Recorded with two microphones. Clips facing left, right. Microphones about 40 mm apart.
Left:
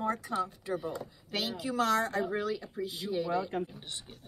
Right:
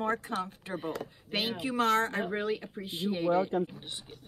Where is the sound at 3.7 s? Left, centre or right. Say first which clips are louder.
Right 1 dB; centre.